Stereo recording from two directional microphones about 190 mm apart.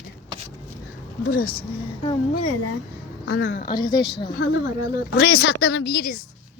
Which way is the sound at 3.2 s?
60° left (ahead or behind).